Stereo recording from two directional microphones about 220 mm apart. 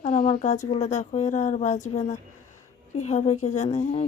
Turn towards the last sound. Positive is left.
turn(degrees=30)  # may be behind; listen again after turning